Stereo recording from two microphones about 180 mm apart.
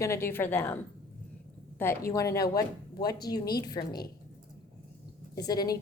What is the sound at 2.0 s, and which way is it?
A woman's voice, 15° left (ahead or behind).